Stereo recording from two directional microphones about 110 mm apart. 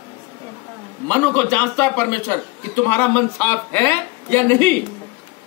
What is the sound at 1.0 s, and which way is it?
A woman's voice, 15° left (ahead or behind).